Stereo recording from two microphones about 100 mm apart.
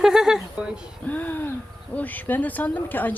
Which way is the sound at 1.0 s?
15° left (ahead or behind).